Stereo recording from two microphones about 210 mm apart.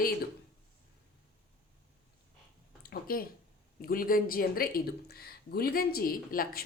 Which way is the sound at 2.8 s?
45° left (ahead or behind).